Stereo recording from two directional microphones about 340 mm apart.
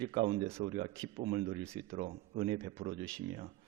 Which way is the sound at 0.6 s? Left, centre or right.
Right.